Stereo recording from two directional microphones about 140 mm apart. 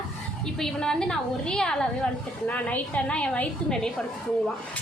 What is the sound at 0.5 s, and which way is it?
A woman's voice, 5° left (ahead or behind).